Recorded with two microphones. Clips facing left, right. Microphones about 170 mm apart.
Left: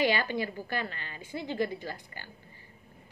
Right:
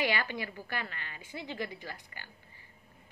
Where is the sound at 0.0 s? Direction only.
30° left (ahead or behind).